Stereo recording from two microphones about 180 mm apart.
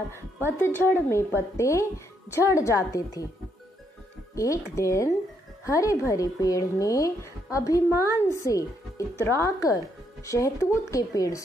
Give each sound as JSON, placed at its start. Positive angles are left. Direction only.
{"t": 0.5, "sound": "a woman's voice", "side_deg": 10}
{"t": 4.4, "sound": "a woman's voice", "side_deg": 15}